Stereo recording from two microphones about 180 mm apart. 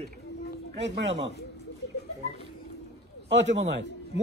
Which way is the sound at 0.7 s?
75° right (ahead or behind).